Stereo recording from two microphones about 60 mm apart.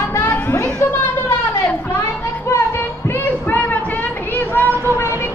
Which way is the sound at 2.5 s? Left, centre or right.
Left.